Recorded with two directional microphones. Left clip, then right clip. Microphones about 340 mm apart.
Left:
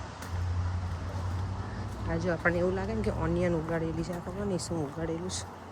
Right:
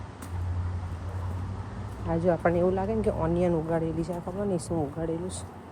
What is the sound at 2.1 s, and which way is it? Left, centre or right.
Speech, centre.